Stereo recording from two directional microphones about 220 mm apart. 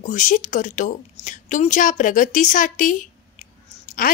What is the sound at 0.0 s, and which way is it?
A woman's voice, 35° left (ahead or behind).